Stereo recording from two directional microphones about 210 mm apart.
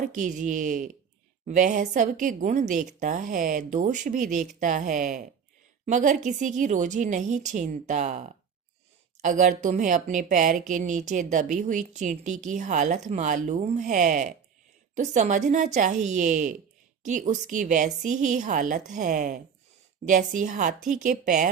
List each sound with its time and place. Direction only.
0.0 s a woman's voice: 35° right (ahead or behind)